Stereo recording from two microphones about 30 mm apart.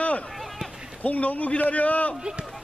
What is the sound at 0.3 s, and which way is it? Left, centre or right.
Run, centre.